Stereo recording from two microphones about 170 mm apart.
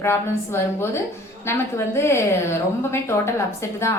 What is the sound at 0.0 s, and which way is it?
A woman's voice, 15° left (ahead or behind).